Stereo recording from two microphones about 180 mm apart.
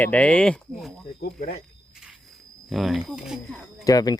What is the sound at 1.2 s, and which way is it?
Speech, 60° left (ahead or behind).